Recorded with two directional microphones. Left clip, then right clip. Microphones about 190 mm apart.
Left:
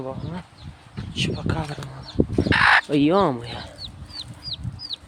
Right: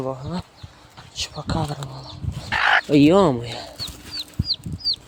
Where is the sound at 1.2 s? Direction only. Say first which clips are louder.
Even; 10° right (ahead or behind).